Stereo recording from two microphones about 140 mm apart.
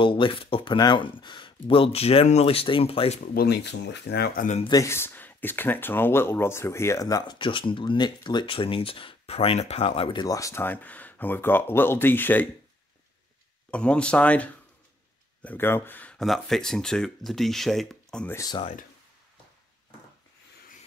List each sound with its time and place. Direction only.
0.0 s speech: 35° left (ahead or behind)
4.6 s speech: 20° left (ahead or behind)
7.3 s speech: 35° left (ahead or behind)
10.2 s speech: 25° left (ahead or behind)
13.7 s speech: 10° left (ahead or behind)
18.3 s speech: 25° left (ahead or behind)